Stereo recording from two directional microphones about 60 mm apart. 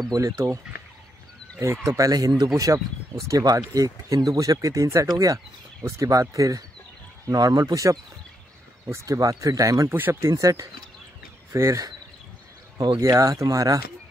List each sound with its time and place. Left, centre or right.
0.1 s speech: right
1.9 s speech: right
5.8 s speech: right
7.2 s speech: right
8.8 s speech: right
9.8 s speech: right
10.3 s speech: right
12.7 s speech: right